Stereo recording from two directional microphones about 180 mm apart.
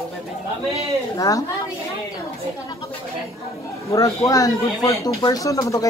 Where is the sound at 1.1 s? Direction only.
20° left (ahead or behind).